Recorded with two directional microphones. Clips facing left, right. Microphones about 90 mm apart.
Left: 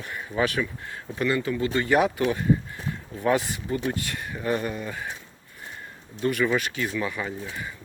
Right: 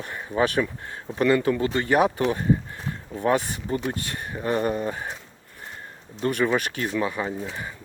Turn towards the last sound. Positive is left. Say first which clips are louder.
# right 3 dB
turn(degrees=-30)  # may be behind; listen again after turning